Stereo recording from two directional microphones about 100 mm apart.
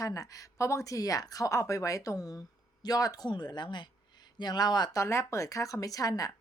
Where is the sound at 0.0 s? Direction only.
35° left (ahead or behind).